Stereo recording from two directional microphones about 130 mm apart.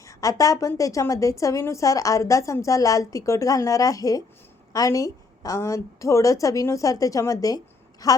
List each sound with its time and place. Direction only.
0.0 s a woman's voice: 25° left (ahead or behind)